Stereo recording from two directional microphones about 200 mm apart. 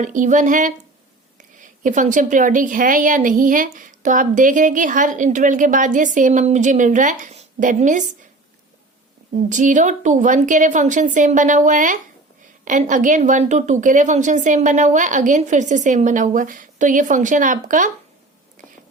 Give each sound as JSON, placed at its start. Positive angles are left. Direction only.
{"t": 0.0, "sound": "a woman's voice", "side_deg": -40}
{"t": 9.3, "sound": "a woman's voice", "side_deg": -45}